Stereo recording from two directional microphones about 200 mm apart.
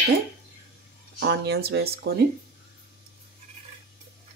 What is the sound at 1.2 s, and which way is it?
Speech, 55° right (ahead or behind).